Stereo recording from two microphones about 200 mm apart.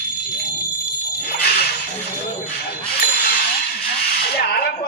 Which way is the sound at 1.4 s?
55° left (ahead or behind).